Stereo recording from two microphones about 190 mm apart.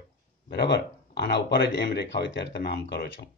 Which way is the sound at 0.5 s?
60° left (ahead or behind).